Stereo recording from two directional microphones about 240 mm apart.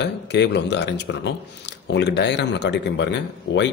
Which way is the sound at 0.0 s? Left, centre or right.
Left.